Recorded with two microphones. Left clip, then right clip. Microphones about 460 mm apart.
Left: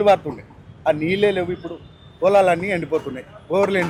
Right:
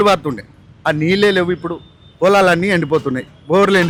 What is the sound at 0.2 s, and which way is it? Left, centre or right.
A man's voice, right.